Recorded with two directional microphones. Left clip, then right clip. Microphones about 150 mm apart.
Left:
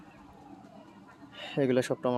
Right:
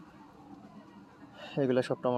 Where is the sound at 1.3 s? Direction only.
15° left (ahead or behind).